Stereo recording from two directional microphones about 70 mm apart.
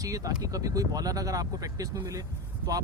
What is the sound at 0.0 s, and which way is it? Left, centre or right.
Speech, right.